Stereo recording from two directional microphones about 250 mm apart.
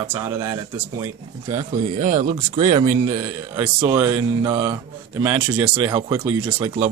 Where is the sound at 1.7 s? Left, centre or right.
Right.